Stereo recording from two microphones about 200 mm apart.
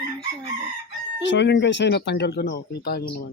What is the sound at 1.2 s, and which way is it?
Speech, 65° left (ahead or behind).